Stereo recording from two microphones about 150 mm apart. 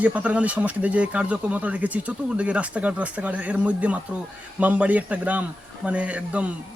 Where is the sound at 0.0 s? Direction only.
10° right (ahead or behind).